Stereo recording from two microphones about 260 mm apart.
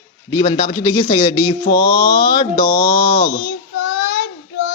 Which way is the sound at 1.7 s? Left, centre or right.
Left.